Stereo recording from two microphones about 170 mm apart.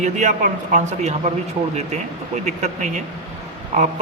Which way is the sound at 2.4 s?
45° right (ahead or behind).